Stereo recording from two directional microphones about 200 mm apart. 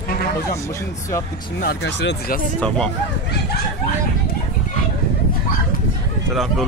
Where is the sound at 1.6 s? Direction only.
55° left (ahead or behind).